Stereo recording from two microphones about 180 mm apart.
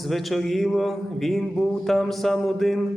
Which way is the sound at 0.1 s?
Centre (ahead or behind).